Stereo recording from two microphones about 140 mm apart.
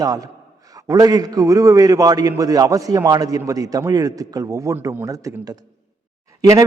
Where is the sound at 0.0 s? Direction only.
25° right (ahead or behind).